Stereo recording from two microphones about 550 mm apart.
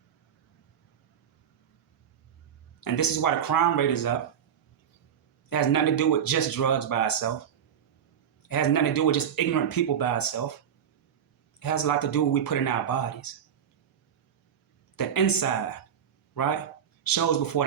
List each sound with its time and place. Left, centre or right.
2.8 s speech: left
5.5 s speech: left
8.4 s speech: left
11.6 s speech: left
14.9 s a man's voice: left